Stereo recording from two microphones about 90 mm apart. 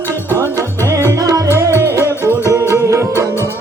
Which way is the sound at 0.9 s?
35° right (ahead or behind).